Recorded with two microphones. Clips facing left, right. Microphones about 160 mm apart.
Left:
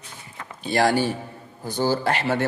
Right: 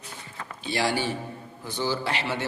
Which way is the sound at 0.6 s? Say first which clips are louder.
Left 6 dB; 50° left (ahead or behind).